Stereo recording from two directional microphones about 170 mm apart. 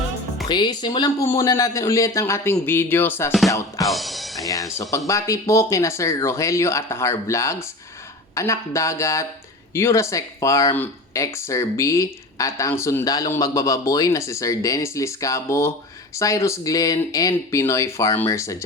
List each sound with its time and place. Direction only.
0.4 s speech: 25° left (ahead or behind)
3.8 s speech: centre (ahead or behind)
4.4 s speech: 20° left (ahead or behind)